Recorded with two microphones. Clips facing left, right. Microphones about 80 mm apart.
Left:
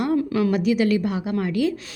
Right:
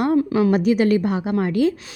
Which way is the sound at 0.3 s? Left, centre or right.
Right.